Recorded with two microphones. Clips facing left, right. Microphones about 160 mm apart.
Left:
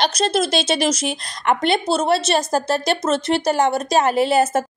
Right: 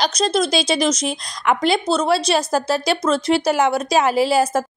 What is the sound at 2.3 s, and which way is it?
A woman's voice, 45° left (ahead or behind).